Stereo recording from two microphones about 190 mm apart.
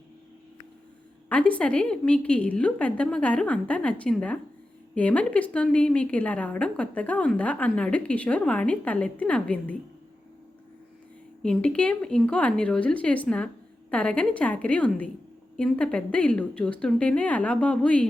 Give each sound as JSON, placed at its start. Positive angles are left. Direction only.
{"t": 1.3, "sound": "a woman's voice", "side_deg": 5}
{"t": 11.4, "sound": "a woman's voice", "side_deg": 5}